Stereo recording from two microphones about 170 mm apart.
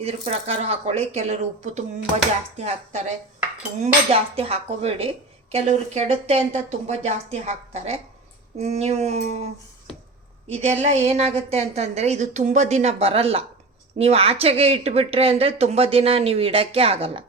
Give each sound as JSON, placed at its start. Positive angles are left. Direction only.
{"t": 0.0, "sound": "a woman's voice", "side_deg": -35}
{"t": 10.5, "sound": "a woman's voice", "side_deg": -40}